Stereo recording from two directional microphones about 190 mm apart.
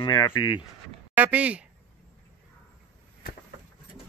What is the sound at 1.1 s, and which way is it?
Speech, 5° right (ahead or behind).